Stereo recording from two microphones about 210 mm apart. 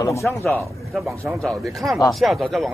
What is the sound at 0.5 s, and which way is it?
A man's voice, centre (ahead or behind).